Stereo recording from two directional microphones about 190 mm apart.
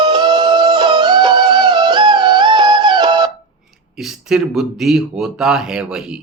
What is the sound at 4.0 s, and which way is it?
Speech, centre (ahead or behind).